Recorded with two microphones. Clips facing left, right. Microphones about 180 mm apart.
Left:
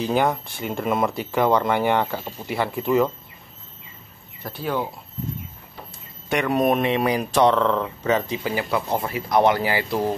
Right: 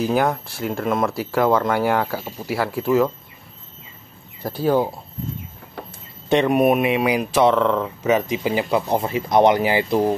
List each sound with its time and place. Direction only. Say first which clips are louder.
0.0 s speech: right 2 dB; 5° right (ahead or behind)
4.4 s speech: right 7 dB; 35° right (ahead or behind)
6.2 s speech: right 4 dB; 20° right (ahead or behind)